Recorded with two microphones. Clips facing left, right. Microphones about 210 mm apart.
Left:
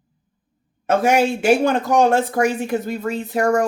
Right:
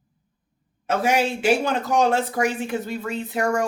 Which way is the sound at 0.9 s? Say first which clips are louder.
Left 5 dB; 50° left (ahead or behind).